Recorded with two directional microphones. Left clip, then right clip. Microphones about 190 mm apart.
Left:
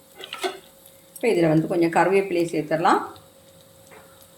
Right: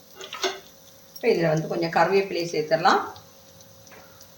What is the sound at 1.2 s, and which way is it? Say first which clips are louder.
Speech: left 2 dB; 45° left (ahead or behind).